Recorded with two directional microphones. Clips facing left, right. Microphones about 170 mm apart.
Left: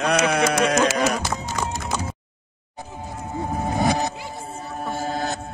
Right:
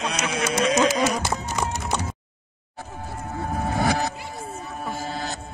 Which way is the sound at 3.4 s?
15° left (ahead or behind).